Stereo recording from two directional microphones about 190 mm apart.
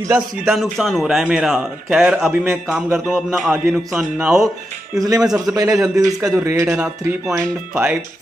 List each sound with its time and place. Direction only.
0.5 s a man's voice: centre (ahead or behind)
5.5 s a man's voice: 15° right (ahead or behind)
6.7 s a man's voice: centre (ahead or behind)